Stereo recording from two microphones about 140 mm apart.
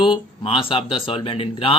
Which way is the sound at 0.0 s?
40° left (ahead or behind).